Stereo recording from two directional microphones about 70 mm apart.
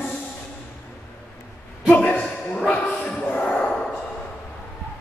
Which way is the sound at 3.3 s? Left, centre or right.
Centre.